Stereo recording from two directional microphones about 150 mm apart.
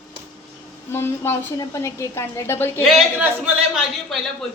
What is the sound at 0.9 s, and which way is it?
A woman's voice, 15° left (ahead or behind).